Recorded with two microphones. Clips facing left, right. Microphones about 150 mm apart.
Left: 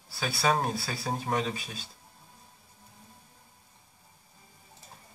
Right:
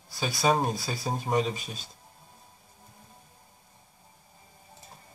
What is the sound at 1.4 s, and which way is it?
Speech, centre (ahead or behind).